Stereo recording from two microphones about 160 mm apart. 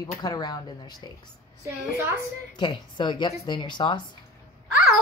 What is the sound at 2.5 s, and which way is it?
A woman's voice, 30° left (ahead or behind).